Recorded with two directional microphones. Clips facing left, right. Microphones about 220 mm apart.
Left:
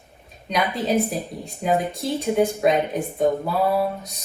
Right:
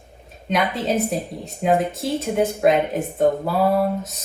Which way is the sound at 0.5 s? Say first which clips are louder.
Even; centre (ahead or behind).